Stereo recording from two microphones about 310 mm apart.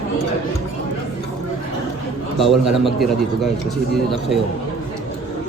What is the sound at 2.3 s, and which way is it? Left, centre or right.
A man's voice, centre.